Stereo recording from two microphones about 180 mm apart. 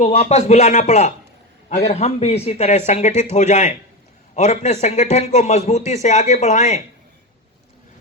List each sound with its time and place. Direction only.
0.0 s a man's voice: 35° left (ahead or behind)